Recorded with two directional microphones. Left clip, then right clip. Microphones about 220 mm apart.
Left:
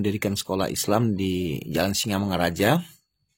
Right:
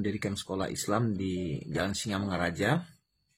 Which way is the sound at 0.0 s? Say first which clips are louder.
Left 7 dB; 45° left (ahead or behind).